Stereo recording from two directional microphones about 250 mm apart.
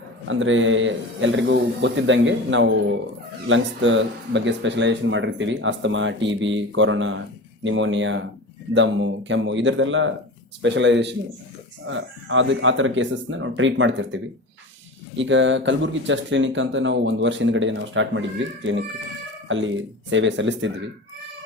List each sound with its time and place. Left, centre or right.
0.3 s speech: right
15.2 s speech: right